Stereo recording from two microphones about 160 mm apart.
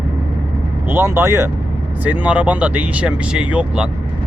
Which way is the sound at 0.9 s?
15° right (ahead or behind).